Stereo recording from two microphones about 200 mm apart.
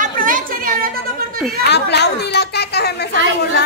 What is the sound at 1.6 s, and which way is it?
Speech, 55° left (ahead or behind).